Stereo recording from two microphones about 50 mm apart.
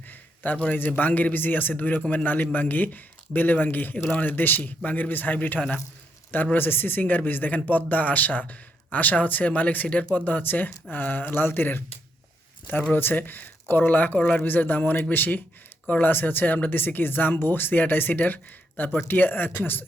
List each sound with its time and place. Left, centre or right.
0.1 s a sound: left
0.8 s speech: left
10.2 s speech: left
13.0 s a man's voice: left